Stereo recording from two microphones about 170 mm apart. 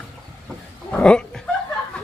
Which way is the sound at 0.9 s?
5° left (ahead or behind).